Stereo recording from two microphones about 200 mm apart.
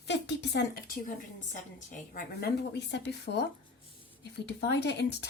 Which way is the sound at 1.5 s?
40° left (ahead or behind).